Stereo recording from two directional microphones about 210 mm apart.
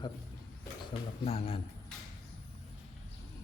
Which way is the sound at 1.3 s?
30° left (ahead or behind).